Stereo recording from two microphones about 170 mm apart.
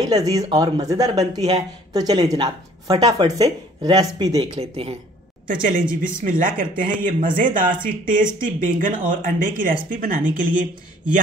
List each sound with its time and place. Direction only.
0.1 s speech: 20° right (ahead or behind)
5.5 s speech: 55° right (ahead or behind)